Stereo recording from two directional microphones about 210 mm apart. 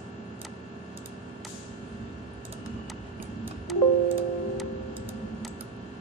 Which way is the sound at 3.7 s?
Centre (ahead or behind).